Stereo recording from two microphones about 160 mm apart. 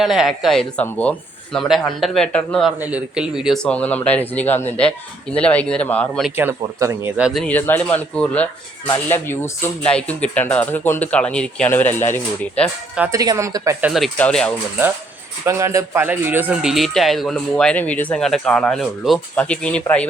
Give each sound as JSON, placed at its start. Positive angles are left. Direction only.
{"t": 0.0, "sound": "speech", "side_deg": 0}
{"t": 1.5, "sound": "speech", "side_deg": 0}
{"t": 2.8, "sound": "speech", "side_deg": -5}
{"t": 6.3, "sound": "speech", "side_deg": -15}
{"t": 7.2, "sound": "speech", "side_deg": -5}
{"t": 7.4, "sound": "speech", "side_deg": 10}
{"t": 13.0, "sound": "a woman's voice", "side_deg": -20}
{"t": 13.9, "sound": "speech", "side_deg": 5}
{"t": 15.4, "sound": "speech", "side_deg": -20}